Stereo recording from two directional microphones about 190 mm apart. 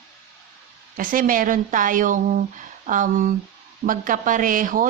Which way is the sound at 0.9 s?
45° right (ahead or behind).